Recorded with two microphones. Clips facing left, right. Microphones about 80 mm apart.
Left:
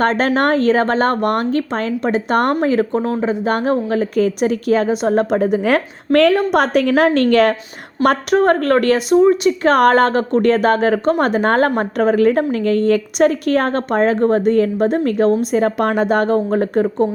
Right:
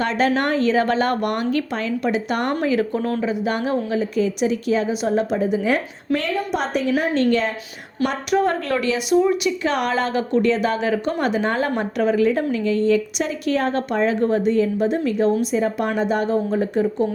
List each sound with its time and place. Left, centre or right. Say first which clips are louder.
0.0 s a woman's voice: left 4 dB; left
2.6 s a woman's voice: left 4 dB; left
6.5 s a woman's voice: left 7 dB; left
8.0 s a woman's voice: left 6 dB; left
15.5 s a woman's voice: left 5 dB; left